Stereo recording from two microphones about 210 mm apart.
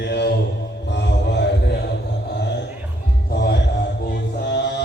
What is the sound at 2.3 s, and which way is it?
Music, 55° left (ahead or behind).